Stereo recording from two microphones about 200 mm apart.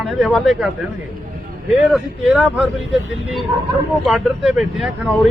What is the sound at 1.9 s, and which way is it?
Speech, 5° right (ahead or behind).